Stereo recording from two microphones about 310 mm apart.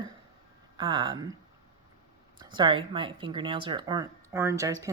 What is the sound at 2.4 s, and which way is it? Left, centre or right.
Speech, centre.